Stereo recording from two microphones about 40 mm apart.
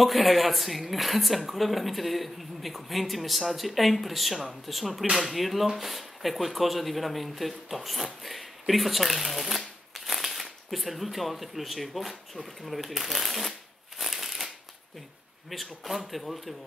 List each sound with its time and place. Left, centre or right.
0.0 s a woman's voice: centre
12.6 s shuffling cards: centre
15.5 s a woman's voice: centre